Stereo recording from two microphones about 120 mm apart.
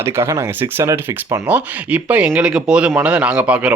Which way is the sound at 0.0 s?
25° right (ahead or behind).